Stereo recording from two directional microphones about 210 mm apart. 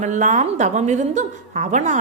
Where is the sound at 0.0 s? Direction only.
35° right (ahead or behind).